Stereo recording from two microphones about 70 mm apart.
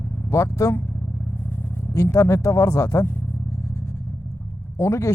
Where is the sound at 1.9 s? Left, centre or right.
Left.